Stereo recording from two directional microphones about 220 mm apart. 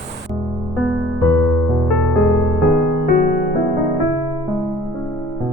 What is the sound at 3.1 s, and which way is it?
Music, 40° left (ahead or behind).